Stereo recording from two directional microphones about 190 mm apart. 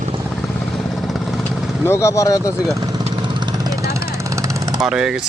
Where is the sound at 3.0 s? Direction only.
25° right (ahead or behind).